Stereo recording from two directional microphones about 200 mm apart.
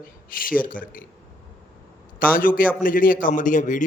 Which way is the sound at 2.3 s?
45° left (ahead or behind).